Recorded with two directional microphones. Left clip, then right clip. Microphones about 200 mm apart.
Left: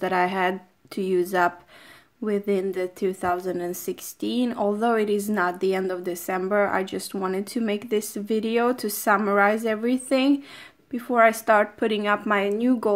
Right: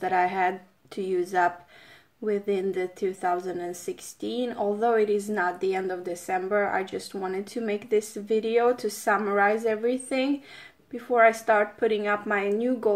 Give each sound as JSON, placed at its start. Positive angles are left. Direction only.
{"t": 0.0, "sound": "a woman's voice", "side_deg": 40}